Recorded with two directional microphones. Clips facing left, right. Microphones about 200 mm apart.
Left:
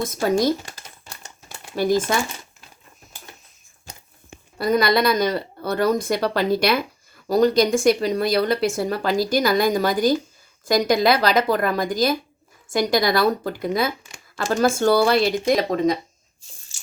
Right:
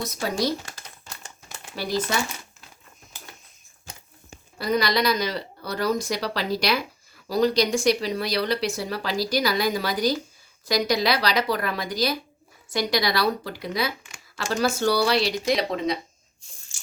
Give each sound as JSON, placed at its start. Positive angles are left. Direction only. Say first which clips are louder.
{"t": 0.0, "sound": "speech", "louder": "left 6 dB", "side_deg": 50}
{"t": 1.7, "sound": "speech", "louder": "left 7 dB", "side_deg": 50}
{"t": 4.5, "sound": "speech", "louder": "left 5 dB", "side_deg": 50}